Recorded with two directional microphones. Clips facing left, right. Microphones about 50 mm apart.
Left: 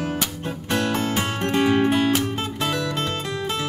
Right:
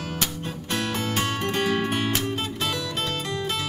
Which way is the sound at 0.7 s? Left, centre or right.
Left.